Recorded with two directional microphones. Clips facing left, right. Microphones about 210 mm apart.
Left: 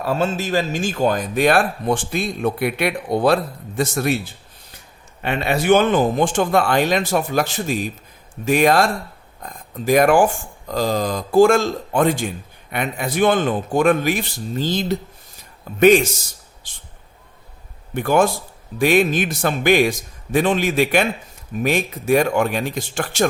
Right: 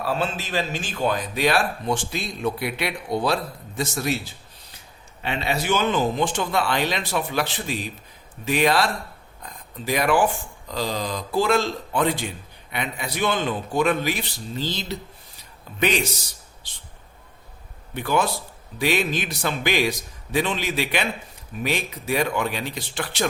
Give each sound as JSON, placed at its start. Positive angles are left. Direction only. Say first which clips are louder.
{"t": 0.0, "sound": "speech", "louder": "left 5 dB", "side_deg": 45}
{"t": 5.2, "sound": "speech", "louder": "left 5 dB", "side_deg": 55}
{"t": 17.9, "sound": "speech", "louder": "left 6 dB", "side_deg": 50}